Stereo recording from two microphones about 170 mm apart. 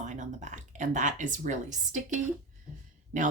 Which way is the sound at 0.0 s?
45° right (ahead or behind).